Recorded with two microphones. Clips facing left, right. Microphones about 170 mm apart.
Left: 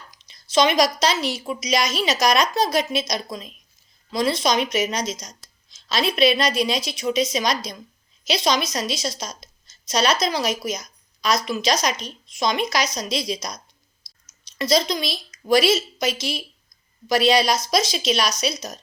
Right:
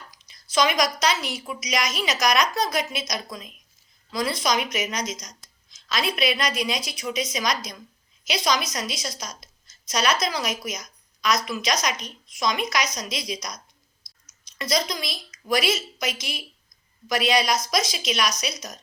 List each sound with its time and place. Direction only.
0.1 s a woman's voice: 25° left (ahead or behind)